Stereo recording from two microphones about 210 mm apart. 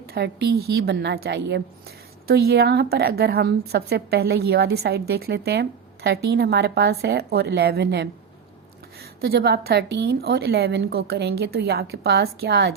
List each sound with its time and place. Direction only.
0.1 s a woman's voice: 50° right (ahead or behind)
9.2 s a woman's voice: 50° right (ahead or behind)